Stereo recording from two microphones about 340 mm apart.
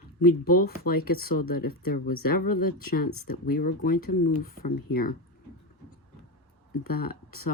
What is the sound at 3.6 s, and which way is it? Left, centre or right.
Speech, left.